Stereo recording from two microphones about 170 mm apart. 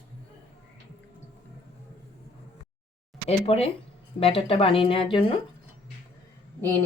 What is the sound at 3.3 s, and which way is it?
Speech, 35° left (ahead or behind).